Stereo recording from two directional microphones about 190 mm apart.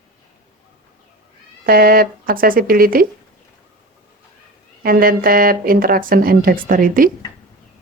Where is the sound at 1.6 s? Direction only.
50° right (ahead or behind).